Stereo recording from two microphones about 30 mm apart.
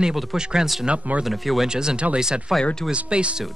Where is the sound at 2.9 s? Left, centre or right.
Right.